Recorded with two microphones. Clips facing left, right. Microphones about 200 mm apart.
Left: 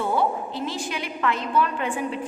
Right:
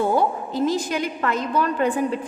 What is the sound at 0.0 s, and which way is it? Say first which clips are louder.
A woman's voice: right 3 dB; 40° right (ahead or behind).